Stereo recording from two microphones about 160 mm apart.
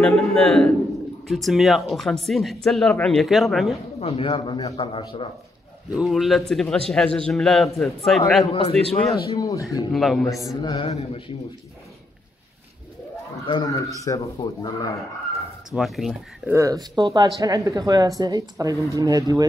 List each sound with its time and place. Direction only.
0.0 s a man's voice: centre (ahead or behind)
4.0 s a man's voice: 35° left (ahead or behind)
5.9 s speech: centre (ahead or behind)
8.5 s a man's voice: 40° left (ahead or behind)
9.4 s speech: 20° left (ahead or behind)
9.9 s speech: centre (ahead or behind)
10.4 s a man's voice: 25° left (ahead or behind)
13.5 s speech: 25° left (ahead or behind)
15.7 s speech: centre (ahead or behind)
16.5 s speech: 20° right (ahead or behind)